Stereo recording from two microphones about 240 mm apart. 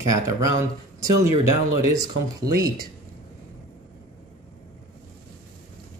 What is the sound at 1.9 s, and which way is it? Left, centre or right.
Speech, centre.